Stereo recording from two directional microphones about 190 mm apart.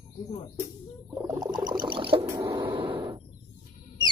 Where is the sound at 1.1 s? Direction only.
15° right (ahead or behind).